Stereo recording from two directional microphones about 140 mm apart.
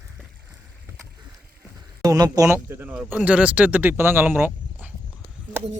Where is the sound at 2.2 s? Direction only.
25° right (ahead or behind).